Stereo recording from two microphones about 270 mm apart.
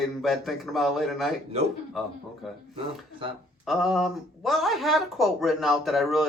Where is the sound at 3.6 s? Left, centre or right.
Centre.